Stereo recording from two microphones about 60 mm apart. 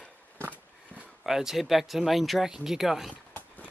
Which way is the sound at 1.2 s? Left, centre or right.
Centre.